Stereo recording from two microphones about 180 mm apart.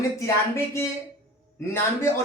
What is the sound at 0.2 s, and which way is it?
Speech, 15° left (ahead or behind).